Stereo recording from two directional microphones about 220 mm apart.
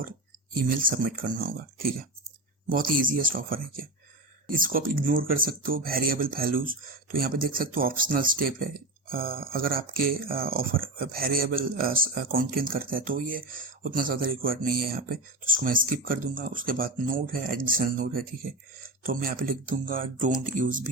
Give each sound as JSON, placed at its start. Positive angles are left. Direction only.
{"t": 0.5, "sound": "speech", "side_deg": -40}